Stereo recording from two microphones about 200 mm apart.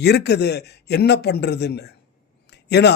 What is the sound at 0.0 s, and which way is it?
A man's voice, 55° left (ahead or behind).